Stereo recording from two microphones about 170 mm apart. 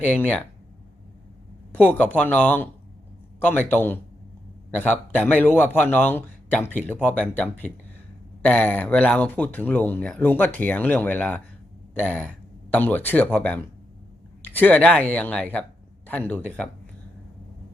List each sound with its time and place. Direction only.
0.0 s a man's voice: 10° left (ahead or behind)
1.7 s a man's voice: 10° left (ahead or behind)